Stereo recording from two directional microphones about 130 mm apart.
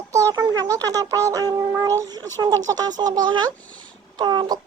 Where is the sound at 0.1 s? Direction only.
25° right (ahead or behind).